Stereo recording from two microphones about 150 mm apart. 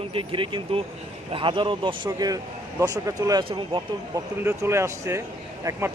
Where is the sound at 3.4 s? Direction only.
35° right (ahead or behind).